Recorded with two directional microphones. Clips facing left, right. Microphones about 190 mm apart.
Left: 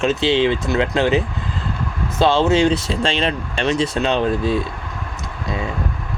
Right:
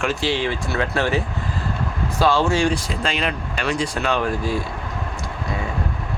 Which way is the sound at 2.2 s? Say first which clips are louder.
Left 3 dB; 25° left (ahead or behind).